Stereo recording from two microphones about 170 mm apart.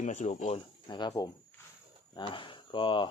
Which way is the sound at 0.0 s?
45° left (ahead or behind).